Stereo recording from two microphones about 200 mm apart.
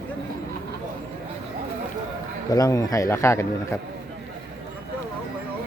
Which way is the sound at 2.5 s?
15° left (ahead or behind).